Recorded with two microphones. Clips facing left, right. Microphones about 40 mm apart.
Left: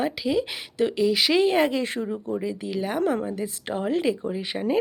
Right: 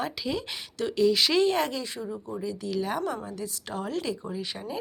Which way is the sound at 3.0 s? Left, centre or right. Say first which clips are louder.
Left 7 dB; left.